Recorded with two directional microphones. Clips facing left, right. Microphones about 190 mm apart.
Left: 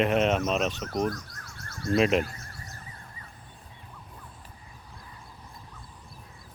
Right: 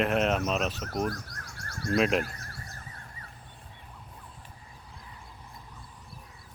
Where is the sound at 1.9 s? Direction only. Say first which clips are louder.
Left 2 dB; centre (ahead or behind).